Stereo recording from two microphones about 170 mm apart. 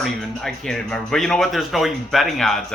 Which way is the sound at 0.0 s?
Centre (ahead or behind).